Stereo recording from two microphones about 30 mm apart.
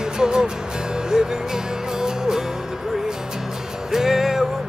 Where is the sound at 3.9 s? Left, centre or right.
Centre.